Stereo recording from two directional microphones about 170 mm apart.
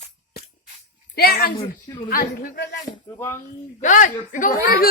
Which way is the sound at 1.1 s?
65° left (ahead or behind).